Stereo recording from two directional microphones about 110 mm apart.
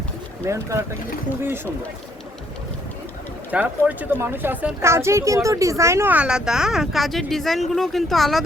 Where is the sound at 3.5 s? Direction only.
15° right (ahead or behind).